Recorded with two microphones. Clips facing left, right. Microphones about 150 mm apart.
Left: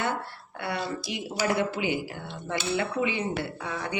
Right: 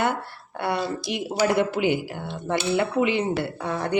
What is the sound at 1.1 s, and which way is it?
Speech, 65° right (ahead or behind).